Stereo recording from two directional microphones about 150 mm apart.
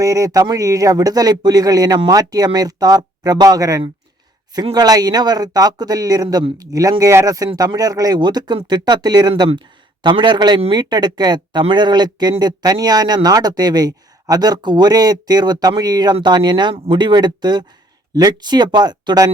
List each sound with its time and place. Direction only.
0.0 s speech: 20° right (ahead or behind)